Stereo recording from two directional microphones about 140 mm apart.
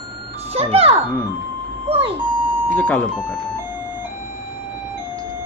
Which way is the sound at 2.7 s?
10° left (ahead or behind).